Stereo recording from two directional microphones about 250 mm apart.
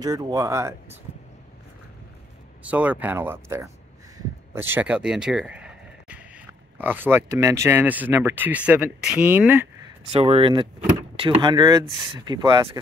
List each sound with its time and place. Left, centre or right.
0.0 s speech: centre
2.6 s speech: centre
10.1 s speech: right